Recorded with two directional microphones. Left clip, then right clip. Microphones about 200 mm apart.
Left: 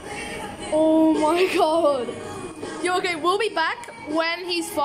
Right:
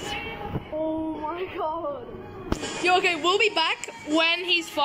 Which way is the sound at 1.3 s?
15° left (ahead or behind).